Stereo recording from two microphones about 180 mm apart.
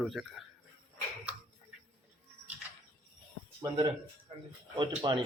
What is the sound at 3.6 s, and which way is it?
Speech, 20° right (ahead or behind).